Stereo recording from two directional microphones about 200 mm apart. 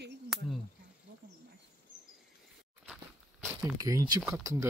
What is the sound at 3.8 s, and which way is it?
Speech, 15° right (ahead or behind).